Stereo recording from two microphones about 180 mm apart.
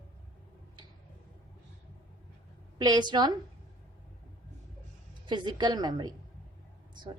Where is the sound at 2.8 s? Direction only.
20° right (ahead or behind).